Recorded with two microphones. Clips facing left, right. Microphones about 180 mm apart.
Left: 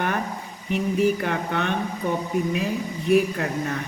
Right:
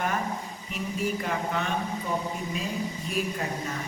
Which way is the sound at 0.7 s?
65° left (ahead or behind).